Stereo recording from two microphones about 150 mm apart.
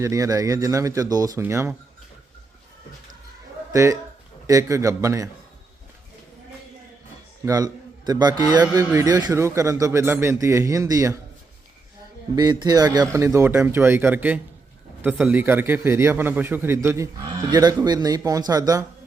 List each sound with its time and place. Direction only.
0.0 s a man's voice: 20° right (ahead or behind)
3.7 s a man's voice: 20° right (ahead or behind)
7.4 s a man's voice: 25° right (ahead or behind)
12.4 s a man's voice: 25° right (ahead or behind)